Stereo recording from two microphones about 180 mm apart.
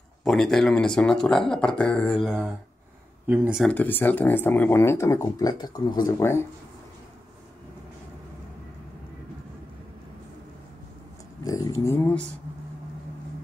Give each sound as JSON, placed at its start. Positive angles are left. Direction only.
{"t": 0.2, "sound": "speech", "side_deg": 5}
{"t": 3.6, "sound": "speech", "side_deg": 10}
{"t": 11.4, "sound": "speech", "side_deg": 20}